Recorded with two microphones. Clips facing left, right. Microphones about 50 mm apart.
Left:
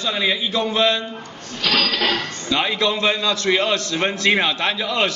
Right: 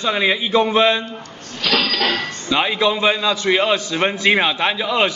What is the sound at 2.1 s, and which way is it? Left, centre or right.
A man's voice, centre.